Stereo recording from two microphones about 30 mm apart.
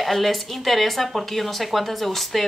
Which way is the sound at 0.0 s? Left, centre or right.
Centre.